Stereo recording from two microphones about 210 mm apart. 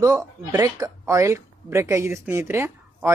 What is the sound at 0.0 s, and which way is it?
Speech, 15° right (ahead or behind).